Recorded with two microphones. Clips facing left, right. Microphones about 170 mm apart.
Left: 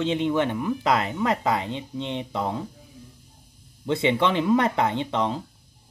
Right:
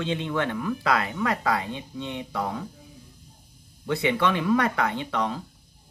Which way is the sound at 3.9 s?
25° left (ahead or behind).